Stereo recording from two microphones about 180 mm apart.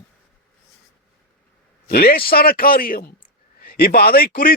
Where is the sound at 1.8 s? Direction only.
60° left (ahead or behind).